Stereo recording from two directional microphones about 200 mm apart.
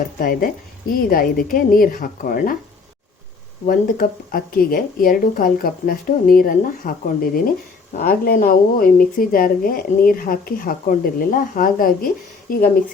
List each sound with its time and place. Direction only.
0.2 s a woman's voice: 45° left (ahead or behind)
3.7 s a woman's voice: 45° left (ahead or behind)